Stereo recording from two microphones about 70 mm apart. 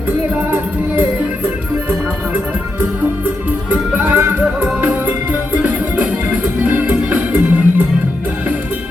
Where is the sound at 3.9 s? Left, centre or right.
Right.